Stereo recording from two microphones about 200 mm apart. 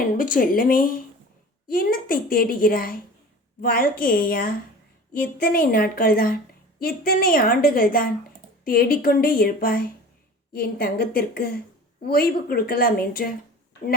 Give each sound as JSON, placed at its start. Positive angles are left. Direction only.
{"t": 0.2, "sound": "a woman's voice", "side_deg": 45}